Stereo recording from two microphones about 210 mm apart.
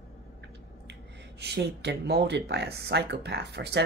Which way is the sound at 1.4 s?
55° right (ahead or behind).